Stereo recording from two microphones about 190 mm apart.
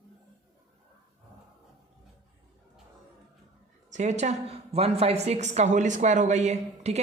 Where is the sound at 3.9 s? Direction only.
40° right (ahead or behind).